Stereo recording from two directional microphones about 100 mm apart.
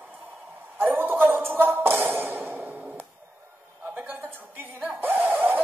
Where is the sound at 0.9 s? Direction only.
20° right (ahead or behind).